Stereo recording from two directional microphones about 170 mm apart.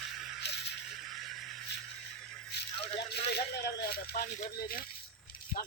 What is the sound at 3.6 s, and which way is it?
Speech, 65° left (ahead or behind).